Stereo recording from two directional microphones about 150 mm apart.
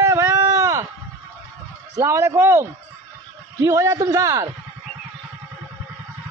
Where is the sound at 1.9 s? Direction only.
20° right (ahead or behind).